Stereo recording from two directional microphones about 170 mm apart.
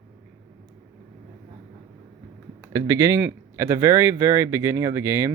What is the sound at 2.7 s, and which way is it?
Speech, 20° right (ahead or behind).